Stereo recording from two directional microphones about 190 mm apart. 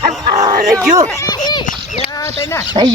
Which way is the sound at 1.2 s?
20° left (ahead or behind).